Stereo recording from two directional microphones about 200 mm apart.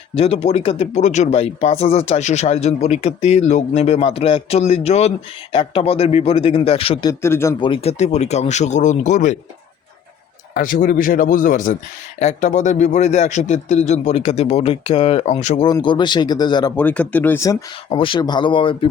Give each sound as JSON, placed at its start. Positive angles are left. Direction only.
{"t": 0.2, "sound": "speech", "side_deg": 30}
{"t": 7.1, "sound": "speech", "side_deg": 15}
{"t": 7.6, "sound": "speech", "side_deg": 30}
{"t": 10.5, "sound": "speech", "side_deg": 45}
{"t": 15.6, "sound": "speech", "side_deg": 25}
{"t": 16.7, "sound": "speech", "side_deg": 5}